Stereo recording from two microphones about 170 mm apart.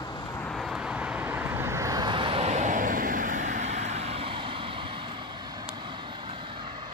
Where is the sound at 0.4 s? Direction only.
Centre (ahead or behind); by 5.0 s 30° right (ahead or behind).